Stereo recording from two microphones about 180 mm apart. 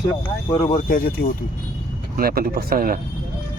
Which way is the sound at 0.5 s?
35° left (ahead or behind).